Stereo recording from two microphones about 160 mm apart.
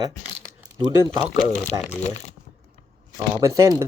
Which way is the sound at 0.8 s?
25° right (ahead or behind).